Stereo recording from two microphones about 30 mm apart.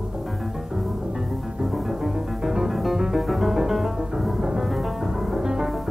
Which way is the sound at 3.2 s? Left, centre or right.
Centre.